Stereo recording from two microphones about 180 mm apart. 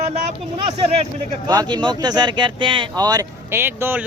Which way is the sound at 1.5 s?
25° right (ahead or behind).